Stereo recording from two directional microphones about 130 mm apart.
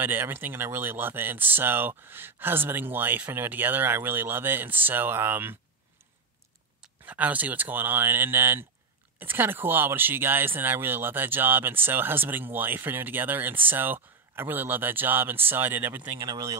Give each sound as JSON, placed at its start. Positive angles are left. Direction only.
{"t": 0.0, "sound": "speech", "side_deg": -15}
{"t": 6.8, "sound": "speech", "side_deg": -10}